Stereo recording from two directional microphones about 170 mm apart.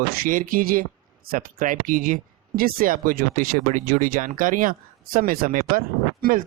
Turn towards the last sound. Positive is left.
turn(degrees=-55)  # may be behind; listen again after turning